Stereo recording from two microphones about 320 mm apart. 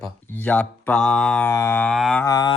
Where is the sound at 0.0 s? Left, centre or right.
Centre.